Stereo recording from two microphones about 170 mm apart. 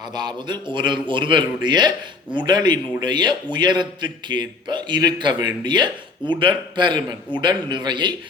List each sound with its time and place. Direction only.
0.1 s a man's voice: 25° right (ahead or behind)